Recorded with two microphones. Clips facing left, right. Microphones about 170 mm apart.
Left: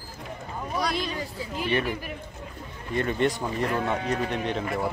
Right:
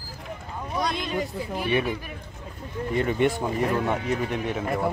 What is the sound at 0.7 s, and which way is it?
Speech, 20° right (ahead or behind).